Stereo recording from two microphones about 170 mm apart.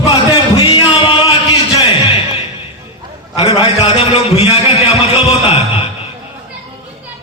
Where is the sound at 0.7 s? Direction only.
30° left (ahead or behind).